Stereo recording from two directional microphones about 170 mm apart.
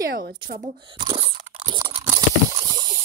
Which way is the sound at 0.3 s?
50° right (ahead or behind).